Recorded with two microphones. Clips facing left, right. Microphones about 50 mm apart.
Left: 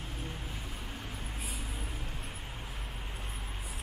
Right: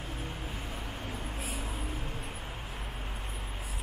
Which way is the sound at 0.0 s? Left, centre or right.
Right.